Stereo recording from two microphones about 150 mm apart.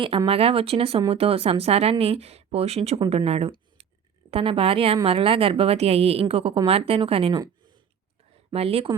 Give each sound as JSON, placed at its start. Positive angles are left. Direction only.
{"t": 0.3, "sound": "a woman's voice", "side_deg": -40}
{"t": 8.5, "sound": "a woman's voice", "side_deg": -40}